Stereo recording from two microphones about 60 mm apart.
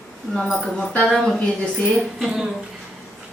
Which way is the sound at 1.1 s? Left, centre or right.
Centre.